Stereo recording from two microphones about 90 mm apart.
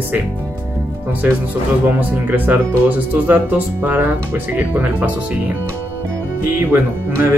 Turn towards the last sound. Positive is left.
turn(degrees=-25)  # may be behind; listen again after turning